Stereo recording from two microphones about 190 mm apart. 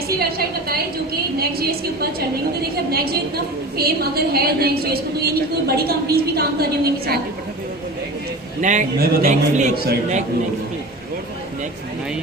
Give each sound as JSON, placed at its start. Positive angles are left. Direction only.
{"t": 0.2, "sound": "a woman's voice", "side_deg": -55}
{"t": 8.6, "sound": "a man's voice", "side_deg": -40}